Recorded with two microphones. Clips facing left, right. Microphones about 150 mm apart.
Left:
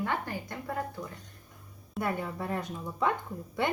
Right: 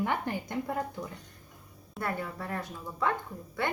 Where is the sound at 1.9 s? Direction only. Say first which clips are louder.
Left 2 dB; 15° left (ahead or behind).